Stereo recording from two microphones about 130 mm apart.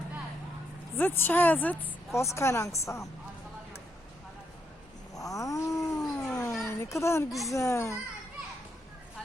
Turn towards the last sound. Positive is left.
turn(degrees=25)  # may be behind; listen again after turning